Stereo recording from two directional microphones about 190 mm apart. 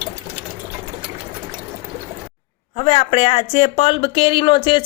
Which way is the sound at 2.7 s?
30° left (ahead or behind).